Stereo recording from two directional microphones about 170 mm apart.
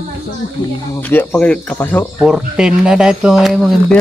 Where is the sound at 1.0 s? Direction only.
10° left (ahead or behind).